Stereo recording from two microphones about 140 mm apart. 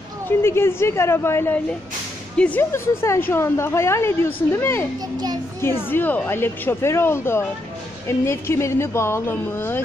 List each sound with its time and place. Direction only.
0.4 s a woman's voice: 15° left (ahead or behind)
5.9 s a woman's voice: 15° left (ahead or behind)